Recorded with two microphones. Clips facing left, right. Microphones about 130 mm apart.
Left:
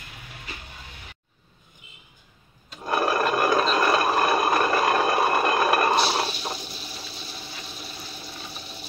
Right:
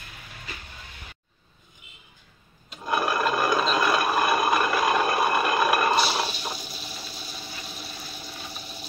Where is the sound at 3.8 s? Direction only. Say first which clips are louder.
Left 2 dB; 35° left (ahead or behind).